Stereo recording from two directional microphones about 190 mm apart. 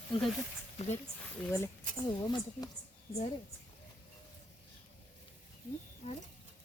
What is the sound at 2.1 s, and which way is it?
Speech, 20° left (ahead or behind).